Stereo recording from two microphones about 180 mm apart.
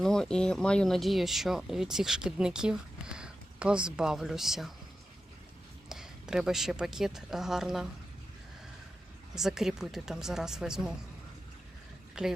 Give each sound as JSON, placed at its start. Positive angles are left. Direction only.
{"t": 0.0, "sound": "speech", "side_deg": 5}
{"t": 5.9, "sound": "speech", "side_deg": -5}
{"t": 9.3, "sound": "speech", "side_deg": 0}
{"t": 12.2, "sound": "speech", "side_deg": -5}